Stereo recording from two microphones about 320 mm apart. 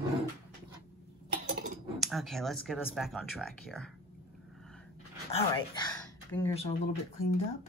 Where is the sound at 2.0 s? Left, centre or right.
Centre.